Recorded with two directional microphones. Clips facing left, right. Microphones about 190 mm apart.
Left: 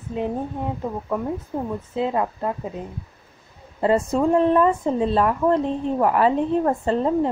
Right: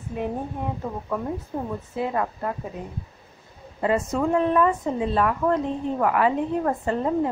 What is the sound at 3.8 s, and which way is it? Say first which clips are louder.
A woman's voice: left 4 dB; 30° left (ahead or behind).